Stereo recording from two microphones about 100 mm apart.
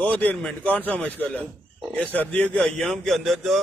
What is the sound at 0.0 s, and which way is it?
A man's voice, 15° left (ahead or behind).